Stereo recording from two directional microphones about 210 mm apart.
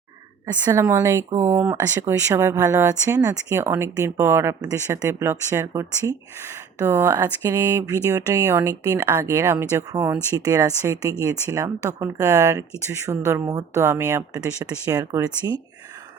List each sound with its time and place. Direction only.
0.5 s speech: 15° right (ahead or behind)